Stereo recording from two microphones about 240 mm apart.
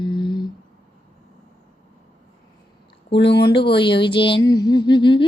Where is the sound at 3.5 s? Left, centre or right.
Left.